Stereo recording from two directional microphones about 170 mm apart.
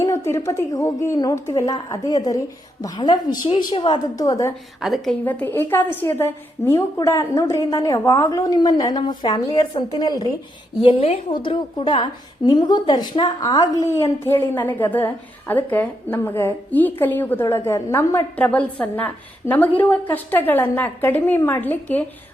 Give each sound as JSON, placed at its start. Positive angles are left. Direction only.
{"t": 0.0, "sound": "a woman's voice", "side_deg": 15}
{"t": 4.8, "sound": "a woman's voice", "side_deg": 0}
{"t": 5.2, "sound": "a woman's voice", "side_deg": 10}